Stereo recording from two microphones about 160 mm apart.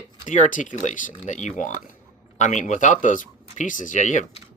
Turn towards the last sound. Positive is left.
turn(degrees=50)  # may be behind; listen again after turning